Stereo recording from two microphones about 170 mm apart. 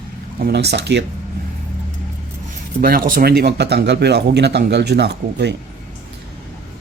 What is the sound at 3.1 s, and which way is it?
Speech, 60° right (ahead or behind).